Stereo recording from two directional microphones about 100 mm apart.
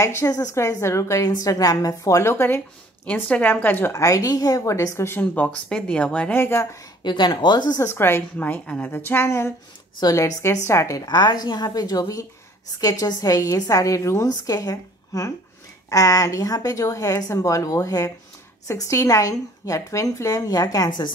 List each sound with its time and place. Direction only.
0.0 s a woman's voice: 30° left (ahead or behind)
3.1 s a woman's voice: 15° left (ahead or behind)
5.2 s speech: 15° left (ahead or behind)
7.0 s speech: 50° left (ahead or behind)
7.8 s a woman's voice: 25° left (ahead or behind); by 21.1 s 45° left (ahead or behind)